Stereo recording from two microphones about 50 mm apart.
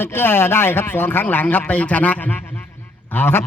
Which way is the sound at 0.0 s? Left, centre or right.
Left.